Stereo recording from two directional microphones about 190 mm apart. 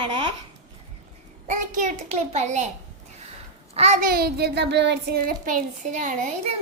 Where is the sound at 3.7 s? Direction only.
35° right (ahead or behind); by 5.2 s 65° right (ahead or behind).